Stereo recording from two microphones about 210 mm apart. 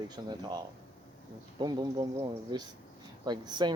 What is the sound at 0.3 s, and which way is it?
Speech, 20° right (ahead or behind).